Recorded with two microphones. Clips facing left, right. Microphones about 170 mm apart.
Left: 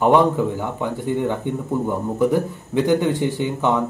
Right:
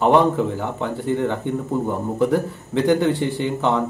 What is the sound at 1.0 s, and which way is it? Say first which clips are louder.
Speech: right 1 dB; 15° left (ahead or behind).